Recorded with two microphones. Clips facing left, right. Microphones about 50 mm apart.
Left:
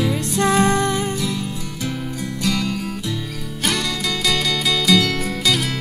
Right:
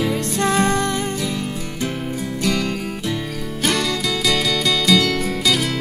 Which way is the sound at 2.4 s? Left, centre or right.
Right.